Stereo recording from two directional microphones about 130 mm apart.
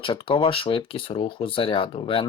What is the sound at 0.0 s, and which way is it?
Speech, 45° left (ahead or behind).